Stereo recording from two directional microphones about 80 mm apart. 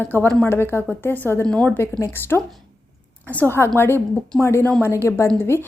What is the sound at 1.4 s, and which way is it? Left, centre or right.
Speech, centre.